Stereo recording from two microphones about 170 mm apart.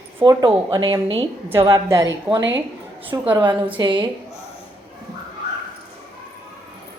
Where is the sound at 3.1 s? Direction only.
20° right (ahead or behind).